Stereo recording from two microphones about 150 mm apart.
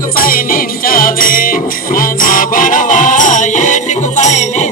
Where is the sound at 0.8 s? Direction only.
70° left (ahead or behind).